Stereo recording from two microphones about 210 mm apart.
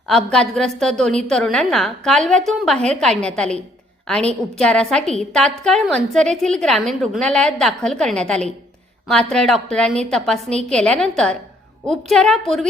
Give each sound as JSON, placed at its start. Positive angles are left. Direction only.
{"t": 0.1, "sound": "a woman's voice", "side_deg": 5}